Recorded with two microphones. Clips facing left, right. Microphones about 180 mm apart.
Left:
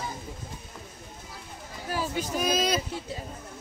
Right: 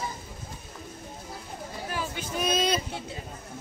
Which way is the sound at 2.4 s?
Centre (ahead or behind).